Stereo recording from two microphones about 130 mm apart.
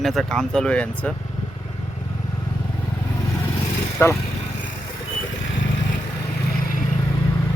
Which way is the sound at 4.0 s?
20° left (ahead or behind).